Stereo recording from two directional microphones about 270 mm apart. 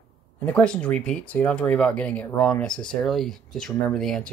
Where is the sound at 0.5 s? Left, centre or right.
Centre.